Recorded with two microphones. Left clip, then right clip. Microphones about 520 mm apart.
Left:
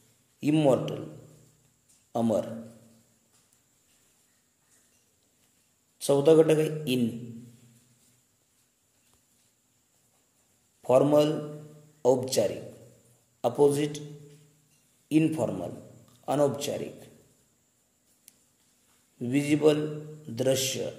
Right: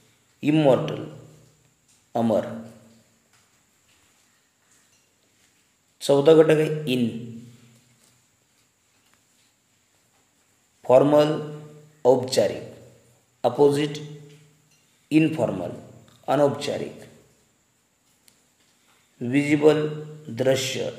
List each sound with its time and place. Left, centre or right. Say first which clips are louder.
0.4 s a man's voice: right 5 dB; left
2.1 s speech: right 5 dB; left
5.9 s speech: right 5 dB; left
10.8 s a man's voice: right 5 dB; left
15.0 s a man's voice: right 5 dB; left
19.1 s a man's voice: right 5 dB; left